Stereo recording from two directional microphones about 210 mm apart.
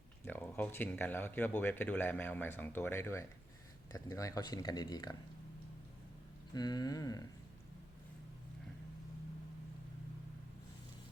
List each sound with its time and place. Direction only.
0.3 s speech: 10° left (ahead or behind)
6.5 s speech: 20° left (ahead or behind)